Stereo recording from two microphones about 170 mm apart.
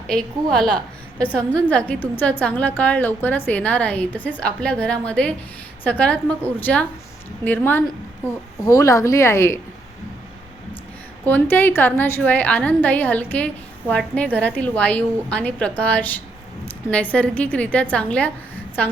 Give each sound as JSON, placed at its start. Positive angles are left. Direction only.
{"t": 0.5, "sound": "a woman's voice", "side_deg": 5}
{"t": 11.3, "sound": "a woman's voice", "side_deg": 10}